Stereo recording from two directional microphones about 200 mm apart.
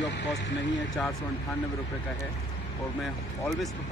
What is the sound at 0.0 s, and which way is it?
Vehicle, 60° left (ahead or behind).